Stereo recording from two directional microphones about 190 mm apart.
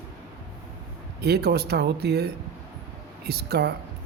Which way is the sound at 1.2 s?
55° right (ahead or behind).